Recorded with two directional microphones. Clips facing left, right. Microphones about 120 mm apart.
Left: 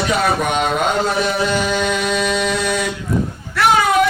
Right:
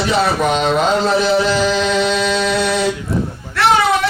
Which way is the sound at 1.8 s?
30° right (ahead or behind).